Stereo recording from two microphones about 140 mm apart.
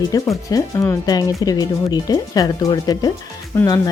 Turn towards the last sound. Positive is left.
turn(degrees=25)  # may be behind; listen again after turning